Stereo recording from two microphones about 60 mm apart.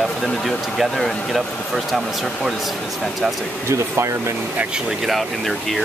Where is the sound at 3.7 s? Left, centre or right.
Right.